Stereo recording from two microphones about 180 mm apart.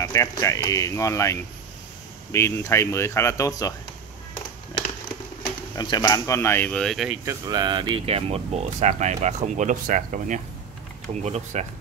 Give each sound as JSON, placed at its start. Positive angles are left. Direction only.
{"t": 0.0, "sound": "speech", "side_deg": 20}
{"t": 5.8, "sound": "speech", "side_deg": 20}
{"t": 7.2, "sound": "speech", "side_deg": -25}